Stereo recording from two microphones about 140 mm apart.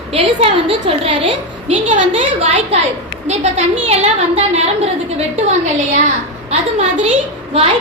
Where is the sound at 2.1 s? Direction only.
50° right (ahead or behind).